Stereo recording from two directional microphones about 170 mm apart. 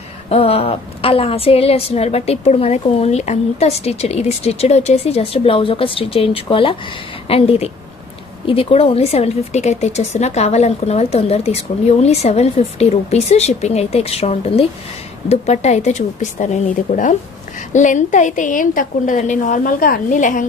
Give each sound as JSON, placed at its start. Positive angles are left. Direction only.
{"t": 0.3, "sound": "a woman's voice", "side_deg": 35}